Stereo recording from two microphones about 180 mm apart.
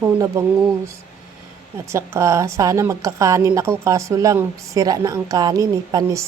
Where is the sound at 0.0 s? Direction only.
15° right (ahead or behind).